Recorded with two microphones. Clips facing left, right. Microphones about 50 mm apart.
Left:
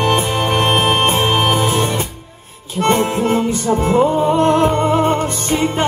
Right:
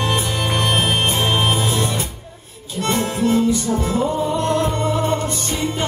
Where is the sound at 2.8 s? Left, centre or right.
Left.